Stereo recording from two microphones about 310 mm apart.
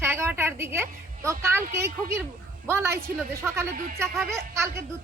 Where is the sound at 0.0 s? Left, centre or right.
Centre.